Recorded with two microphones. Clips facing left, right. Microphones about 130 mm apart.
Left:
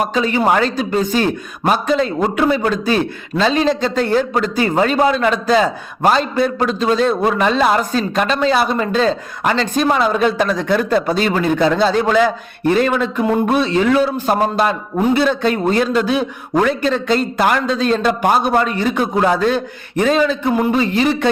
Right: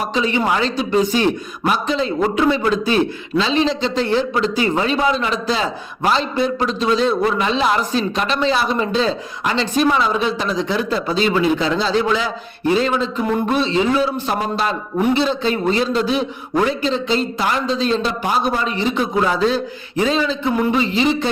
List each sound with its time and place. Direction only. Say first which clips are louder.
0.1 s a man's voice: left 3 dB; 45° left (ahead or behind)